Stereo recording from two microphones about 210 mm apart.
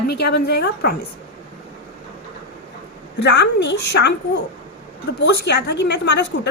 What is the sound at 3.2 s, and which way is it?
Speech, 55° left (ahead or behind).